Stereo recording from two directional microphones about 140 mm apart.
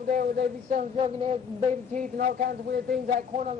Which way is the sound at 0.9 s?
45° right (ahead or behind).